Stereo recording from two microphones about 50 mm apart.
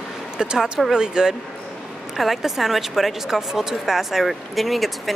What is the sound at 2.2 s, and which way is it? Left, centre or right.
Speech, centre.